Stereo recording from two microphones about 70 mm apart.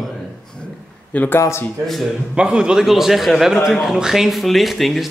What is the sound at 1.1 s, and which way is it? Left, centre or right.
Speech, left.